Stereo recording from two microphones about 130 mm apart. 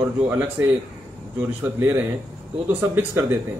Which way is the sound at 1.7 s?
15° right (ahead or behind).